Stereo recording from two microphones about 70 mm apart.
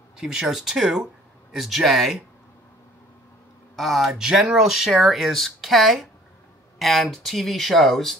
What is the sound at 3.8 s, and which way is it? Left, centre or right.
Speech, centre.